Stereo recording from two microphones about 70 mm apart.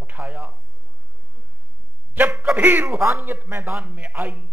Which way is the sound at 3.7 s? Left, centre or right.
Centre.